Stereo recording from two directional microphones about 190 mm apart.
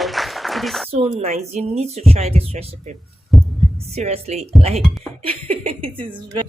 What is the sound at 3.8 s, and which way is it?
Speech, 35° right (ahead or behind).